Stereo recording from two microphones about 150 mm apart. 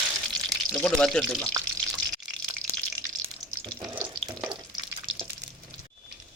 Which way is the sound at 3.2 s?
35° right (ahead or behind).